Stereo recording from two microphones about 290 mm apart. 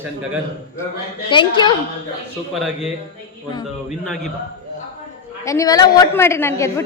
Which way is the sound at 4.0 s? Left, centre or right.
Centre.